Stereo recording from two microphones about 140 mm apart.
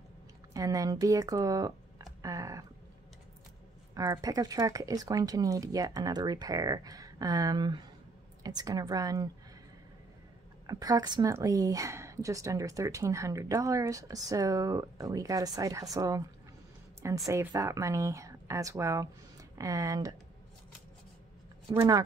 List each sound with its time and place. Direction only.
0.5 s speech: 25° right (ahead or behind)
3.9 s speech: 25° right (ahead or behind)
10.7 s speech: 25° right (ahead or behind)
17.3 s speech: 25° right (ahead or behind)